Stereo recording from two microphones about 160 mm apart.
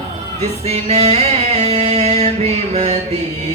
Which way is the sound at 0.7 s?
40° right (ahead or behind).